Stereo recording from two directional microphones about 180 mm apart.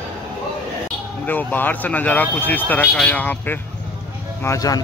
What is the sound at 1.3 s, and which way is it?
Speech, 10° left (ahead or behind).